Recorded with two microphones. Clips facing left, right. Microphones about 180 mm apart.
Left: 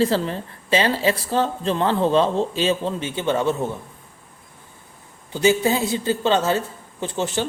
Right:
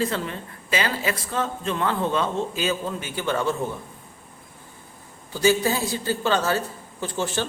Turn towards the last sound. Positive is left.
turn(degrees=20)  # may be behind; listen again after turning